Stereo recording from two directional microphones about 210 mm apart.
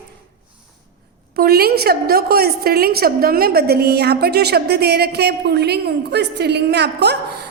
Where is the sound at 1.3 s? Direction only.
45° right (ahead or behind).